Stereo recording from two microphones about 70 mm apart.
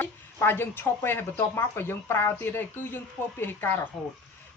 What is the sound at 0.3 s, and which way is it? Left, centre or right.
Speech, left.